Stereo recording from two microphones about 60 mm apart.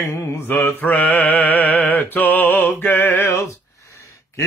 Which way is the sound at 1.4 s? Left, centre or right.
Left.